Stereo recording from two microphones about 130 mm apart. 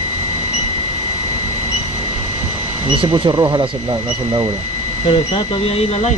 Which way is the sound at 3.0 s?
30° right (ahead or behind).